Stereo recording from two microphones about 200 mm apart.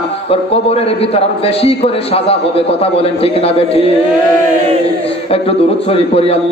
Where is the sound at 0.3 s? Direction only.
30° left (ahead or behind).